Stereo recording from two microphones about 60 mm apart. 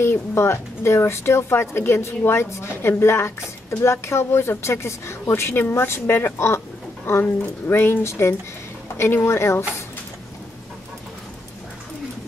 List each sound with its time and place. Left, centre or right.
0.0 s a woman's voice: left